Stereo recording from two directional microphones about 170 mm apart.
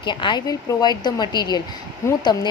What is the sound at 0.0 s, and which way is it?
A woman's voice, 25° left (ahead or behind).